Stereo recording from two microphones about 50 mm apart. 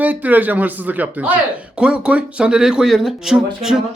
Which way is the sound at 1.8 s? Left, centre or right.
Right.